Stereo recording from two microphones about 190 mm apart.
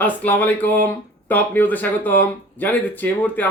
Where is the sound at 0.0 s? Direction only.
10° left (ahead or behind).